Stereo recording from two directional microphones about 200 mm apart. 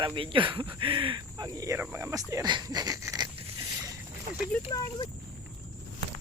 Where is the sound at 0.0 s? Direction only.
25° right (ahead or behind).